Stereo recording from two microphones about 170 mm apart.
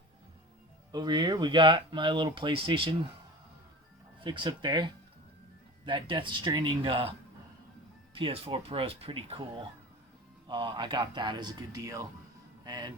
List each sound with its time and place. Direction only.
0.9 s speech: 25° right (ahead or behind)
4.2 s speech: 25° right (ahead or behind)
8.1 s speech: 30° right (ahead or behind)
12.6 s music: 25° right (ahead or behind)